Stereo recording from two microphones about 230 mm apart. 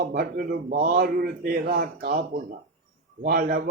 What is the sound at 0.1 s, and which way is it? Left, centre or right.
Speech, right.